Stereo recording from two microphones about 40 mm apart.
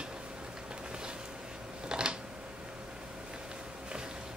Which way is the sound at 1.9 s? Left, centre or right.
Centre.